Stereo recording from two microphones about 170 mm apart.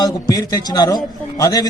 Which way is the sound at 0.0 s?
20° left (ahead or behind).